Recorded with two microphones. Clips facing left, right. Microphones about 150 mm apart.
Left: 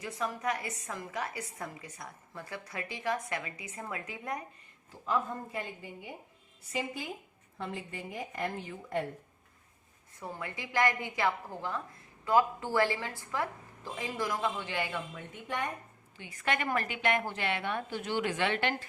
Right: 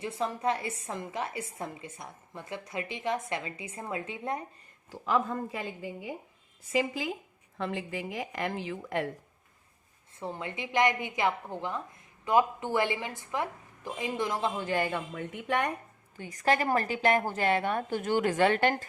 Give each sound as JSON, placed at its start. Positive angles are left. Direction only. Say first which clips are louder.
{"t": 0.0, "sound": "a woman's voice", "louder": "right 4 dB", "side_deg": -25}
{"t": 4.9, "sound": "a woman's voice", "louder": "right 4 dB", "side_deg": -90}
{"t": 6.7, "sound": "a woman's voice", "louder": "right 7 dB", "side_deg": -90}
{"t": 10.2, "sound": "a woman's voice", "louder": "right 4 dB", "side_deg": -25}
{"t": 14.6, "sound": "a man's voice", "louder": "right 6 dB", "side_deg": -45}
{"t": 15.1, "sound": "a woman's voice", "louder": "right 7 dB", "side_deg": -70}
{"t": 16.1, "sound": "a woman's voice", "louder": "right 6 dB", "side_deg": -40}